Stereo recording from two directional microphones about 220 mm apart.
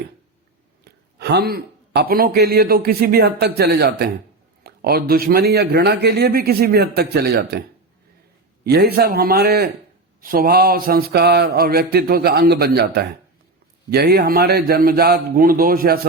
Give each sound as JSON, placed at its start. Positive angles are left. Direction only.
{"t": 1.2, "sound": "a man's voice", "side_deg": -50}
{"t": 8.6, "sound": "a man's voice", "side_deg": -45}